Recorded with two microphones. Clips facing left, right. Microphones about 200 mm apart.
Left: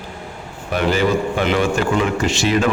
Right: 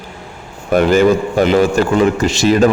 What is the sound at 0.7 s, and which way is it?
Speech, 45° right (ahead or behind).